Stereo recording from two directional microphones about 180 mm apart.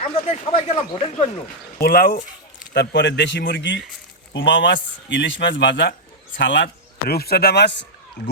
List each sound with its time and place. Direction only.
0.0 s speech: 35° left (ahead or behind)
1.8 s speech: 55° left (ahead or behind)
2.7 s a man's voice: 75° left (ahead or behind)
7.1 s speech: 60° left (ahead or behind)